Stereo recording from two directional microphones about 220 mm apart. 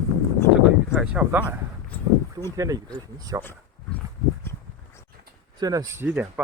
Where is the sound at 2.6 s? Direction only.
15° right (ahead or behind).